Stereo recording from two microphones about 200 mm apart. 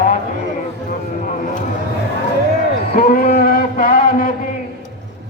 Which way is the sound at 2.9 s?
45° left (ahead or behind).